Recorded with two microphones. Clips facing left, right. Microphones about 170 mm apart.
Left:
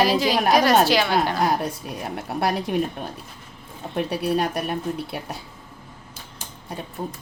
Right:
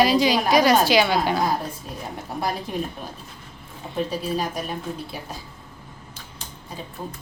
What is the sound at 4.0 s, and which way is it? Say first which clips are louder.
Speech: left 3 dB; 70° left (ahead or behind).